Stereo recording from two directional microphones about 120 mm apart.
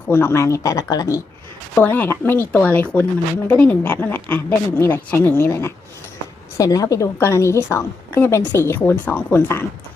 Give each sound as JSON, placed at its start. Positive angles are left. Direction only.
{"t": 0.1, "sound": "a woman's voice", "side_deg": 20}
{"t": 1.7, "sound": "a woman's voice", "side_deg": 15}